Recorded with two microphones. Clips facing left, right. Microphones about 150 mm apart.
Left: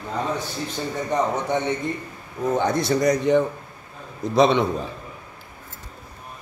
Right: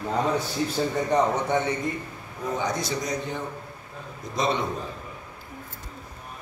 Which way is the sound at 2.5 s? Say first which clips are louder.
Left 7 dB; 55° left (ahead or behind).